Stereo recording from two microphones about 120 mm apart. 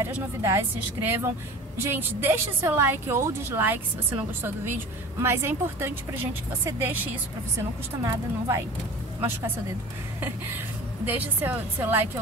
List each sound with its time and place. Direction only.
0.0 s a woman's voice: 25° right (ahead or behind)
5.2 s a woman's voice: 20° right (ahead or behind)
11.1 s a woman's voice: 15° right (ahead or behind)